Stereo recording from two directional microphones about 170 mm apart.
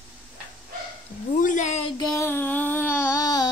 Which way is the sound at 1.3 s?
50° left (ahead or behind).